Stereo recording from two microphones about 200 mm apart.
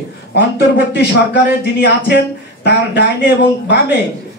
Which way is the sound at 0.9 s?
60° left (ahead or behind).